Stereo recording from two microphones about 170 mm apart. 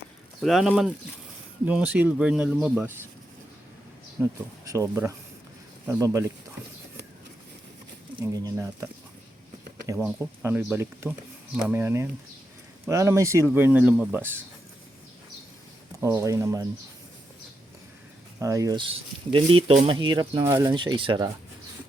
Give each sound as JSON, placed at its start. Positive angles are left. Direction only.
{"t": 0.4, "sound": "speech", "side_deg": 0}
{"t": 4.2, "sound": "speech", "side_deg": -20}
{"t": 8.2, "sound": "speech", "side_deg": -20}
{"t": 16.0, "sound": "speech", "side_deg": -20}
{"t": 18.3, "sound": "speech", "side_deg": -20}
{"t": 19.3, "sound": "speech", "side_deg": -30}